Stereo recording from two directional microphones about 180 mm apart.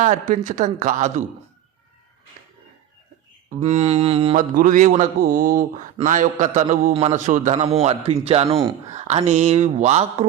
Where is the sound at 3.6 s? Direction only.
35° right (ahead or behind).